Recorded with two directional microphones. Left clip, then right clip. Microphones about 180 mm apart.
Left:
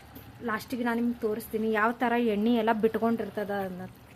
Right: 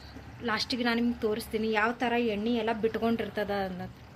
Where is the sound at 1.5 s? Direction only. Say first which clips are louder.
Left 3 dB; 25° left (ahead or behind).